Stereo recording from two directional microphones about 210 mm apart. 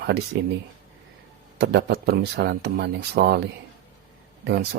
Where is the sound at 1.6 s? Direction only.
55° right (ahead or behind).